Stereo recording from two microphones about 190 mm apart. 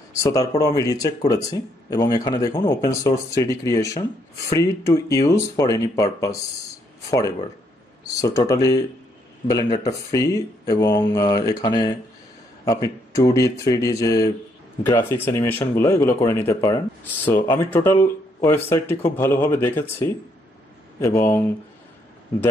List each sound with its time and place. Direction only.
0.1 s speech: 15° left (ahead or behind)